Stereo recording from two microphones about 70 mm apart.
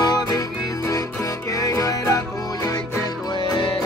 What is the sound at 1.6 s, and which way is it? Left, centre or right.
Music, left.